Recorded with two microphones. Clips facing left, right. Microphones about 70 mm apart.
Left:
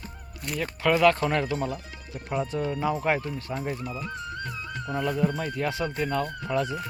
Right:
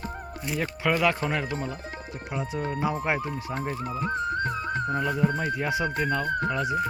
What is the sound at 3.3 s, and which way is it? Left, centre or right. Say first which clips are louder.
Speech: right 1 dB; right.